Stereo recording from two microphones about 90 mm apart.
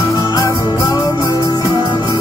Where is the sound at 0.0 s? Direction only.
40° left (ahead or behind).